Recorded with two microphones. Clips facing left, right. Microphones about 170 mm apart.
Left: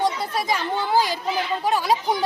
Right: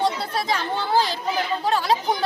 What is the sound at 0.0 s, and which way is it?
Speech, 15° left (ahead or behind).